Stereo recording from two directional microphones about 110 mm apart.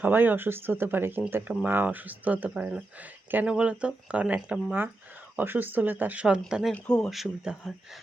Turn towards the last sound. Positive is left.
turn(degrees=0)  # may be behind; listen again after turning